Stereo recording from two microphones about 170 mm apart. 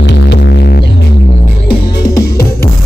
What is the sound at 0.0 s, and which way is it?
Music, 85° left.